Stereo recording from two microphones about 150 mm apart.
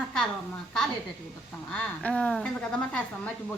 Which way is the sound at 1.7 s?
5° left (ahead or behind).